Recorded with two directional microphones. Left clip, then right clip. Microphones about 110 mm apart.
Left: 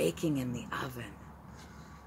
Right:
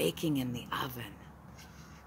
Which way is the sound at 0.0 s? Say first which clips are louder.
Left 1 dB; 40° right (ahead or behind).